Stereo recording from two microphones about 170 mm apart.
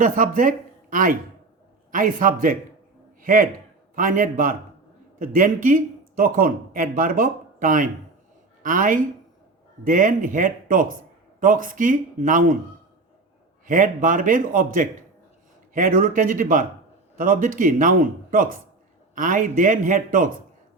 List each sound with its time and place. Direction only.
0.0 s a man's voice: 55° right (ahead or behind)
13.7 s speech: 50° right (ahead or behind)